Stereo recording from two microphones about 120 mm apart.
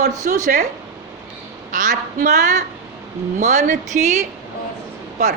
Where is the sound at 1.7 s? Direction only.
90° right.